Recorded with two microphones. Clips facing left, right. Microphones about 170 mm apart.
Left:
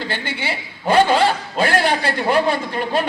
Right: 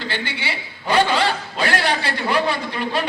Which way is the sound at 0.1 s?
50° left (ahead or behind).